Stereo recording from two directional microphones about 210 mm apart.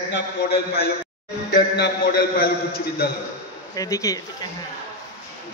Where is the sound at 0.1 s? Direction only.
50° left (ahead or behind).